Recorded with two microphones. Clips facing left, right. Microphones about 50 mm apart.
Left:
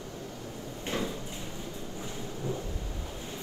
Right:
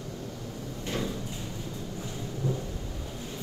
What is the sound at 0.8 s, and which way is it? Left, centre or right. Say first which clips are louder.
Drawer open or close: even; left.